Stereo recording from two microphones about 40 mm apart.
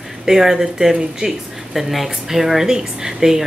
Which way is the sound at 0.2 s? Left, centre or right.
Centre.